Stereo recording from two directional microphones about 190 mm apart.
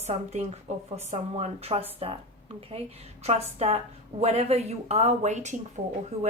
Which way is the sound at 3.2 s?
35° right (ahead or behind).